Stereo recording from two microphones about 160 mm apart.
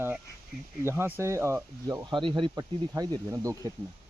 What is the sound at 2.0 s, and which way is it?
Speech, 30° right (ahead or behind).